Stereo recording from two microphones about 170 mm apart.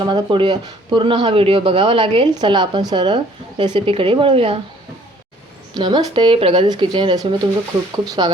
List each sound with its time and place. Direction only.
0.0 s speech: 25° right (ahead or behind)
5.7 s speech: 25° right (ahead or behind)